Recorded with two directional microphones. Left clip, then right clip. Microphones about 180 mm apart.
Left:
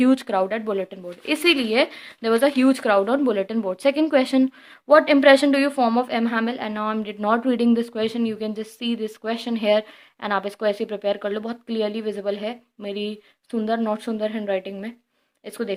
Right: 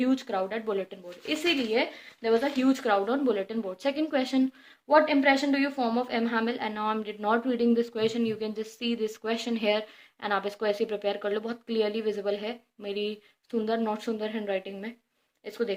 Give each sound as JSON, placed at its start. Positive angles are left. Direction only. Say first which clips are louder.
{"t": 0.0, "sound": "speech", "louder": "left 8 dB", "side_deg": 40}
{"t": 1.3, "sound": "speech", "louder": "left 7 dB", "side_deg": 50}
{"t": 4.9, "sound": "a woman's voice", "louder": "left 8 dB", "side_deg": 50}